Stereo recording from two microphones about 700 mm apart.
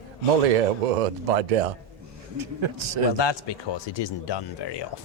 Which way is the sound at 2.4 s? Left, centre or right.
Right.